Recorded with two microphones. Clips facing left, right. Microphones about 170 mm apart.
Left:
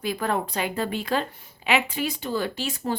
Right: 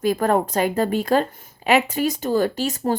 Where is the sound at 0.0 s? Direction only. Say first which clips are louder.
Right 7 dB; 45° right (ahead or behind).